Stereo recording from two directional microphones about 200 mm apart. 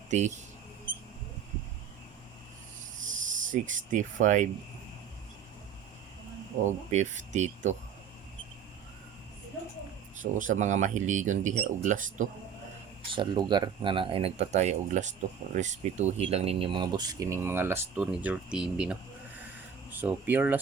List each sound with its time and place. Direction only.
0.1 s speech: 35° right (ahead or behind)
3.2 s speech: 40° right (ahead or behind)
6.7 s speech: 35° right (ahead or behind)
10.3 s speech: 40° right (ahead or behind)
13.1 s speech: 20° right (ahead or behind)